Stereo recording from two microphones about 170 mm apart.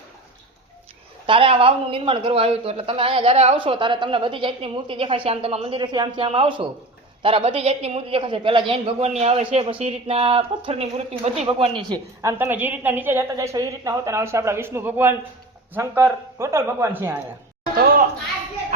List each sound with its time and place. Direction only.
1.3 s a woman's voice: 30° right (ahead or behind)
12.2 s a woman's voice: 15° right (ahead or behind)